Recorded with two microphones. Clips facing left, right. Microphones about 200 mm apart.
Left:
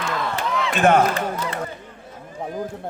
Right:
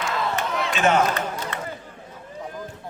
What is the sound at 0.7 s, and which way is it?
Speech, 55° left (ahead or behind).